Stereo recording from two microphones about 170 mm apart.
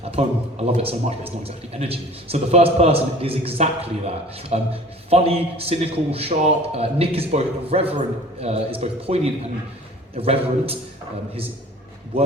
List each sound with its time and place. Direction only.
0.0 s a man's voice: 35° right (ahead or behind)